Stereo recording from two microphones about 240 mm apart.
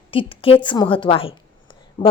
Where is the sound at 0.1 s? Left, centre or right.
Left.